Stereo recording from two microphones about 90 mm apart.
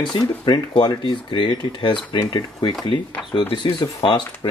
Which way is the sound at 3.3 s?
70° left (ahead or behind).